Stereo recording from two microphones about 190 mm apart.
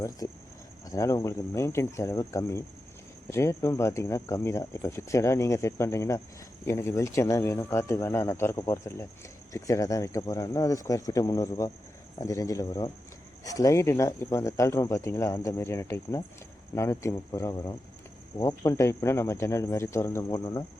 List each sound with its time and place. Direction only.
0.2 s speech: 15° left (ahead or behind)